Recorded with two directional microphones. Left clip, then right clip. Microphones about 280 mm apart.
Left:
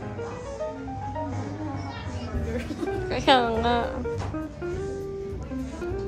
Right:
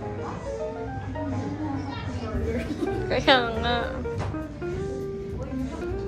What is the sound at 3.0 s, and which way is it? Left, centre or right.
Speech, centre.